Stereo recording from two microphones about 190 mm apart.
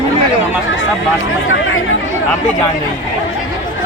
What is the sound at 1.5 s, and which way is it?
Speech, 90° left.